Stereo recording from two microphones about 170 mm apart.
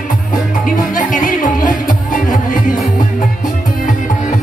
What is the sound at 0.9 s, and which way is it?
Music, 50° left (ahead or behind).